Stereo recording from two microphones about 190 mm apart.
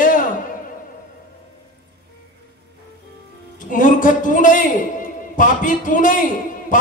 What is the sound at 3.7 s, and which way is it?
A man's voice, 45° left (ahead or behind).